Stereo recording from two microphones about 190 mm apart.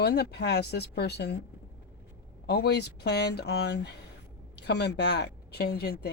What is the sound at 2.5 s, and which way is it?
A woman's voice, 60° left (ahead or behind).